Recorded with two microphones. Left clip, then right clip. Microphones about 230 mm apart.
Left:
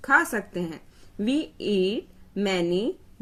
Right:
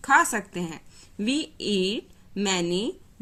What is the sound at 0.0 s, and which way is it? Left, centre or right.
A woman's voice, centre.